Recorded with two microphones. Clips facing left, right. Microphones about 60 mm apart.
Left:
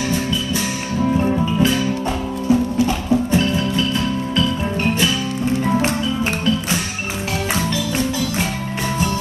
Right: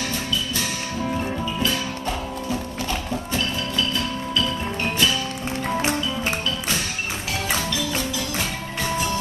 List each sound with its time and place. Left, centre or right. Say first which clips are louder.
1.1 s music: left 10 dB; centre
1.4 s music: left 7 dB; left